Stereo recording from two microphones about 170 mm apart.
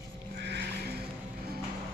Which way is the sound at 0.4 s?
85° right.